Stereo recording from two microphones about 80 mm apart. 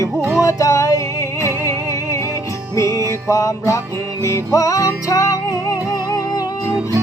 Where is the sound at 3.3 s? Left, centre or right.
Left.